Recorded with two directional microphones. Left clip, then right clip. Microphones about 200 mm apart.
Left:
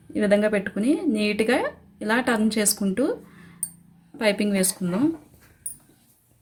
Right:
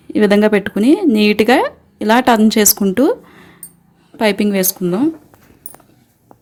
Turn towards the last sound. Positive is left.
turn(degrees=-50)  # may be behind; listen again after turning